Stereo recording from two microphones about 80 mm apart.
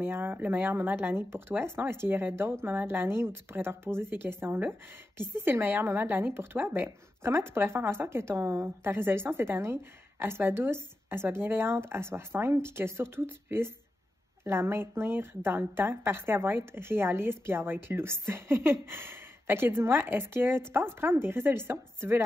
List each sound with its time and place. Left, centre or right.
0.0 s a woman's voice: right